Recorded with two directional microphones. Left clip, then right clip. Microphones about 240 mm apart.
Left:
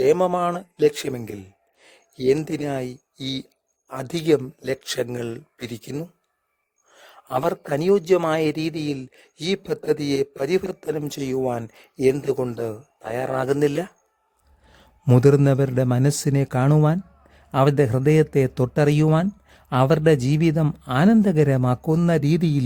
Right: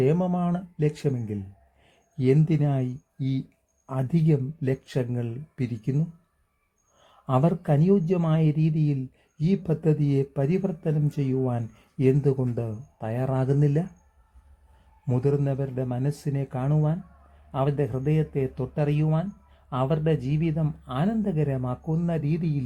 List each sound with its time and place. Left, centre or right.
0.0 s speech: left
7.0 s speech: left
15.0 s speech: left